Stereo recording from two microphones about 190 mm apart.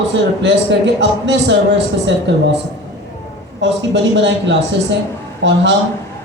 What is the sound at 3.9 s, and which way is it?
Speech, 70° right (ahead or behind).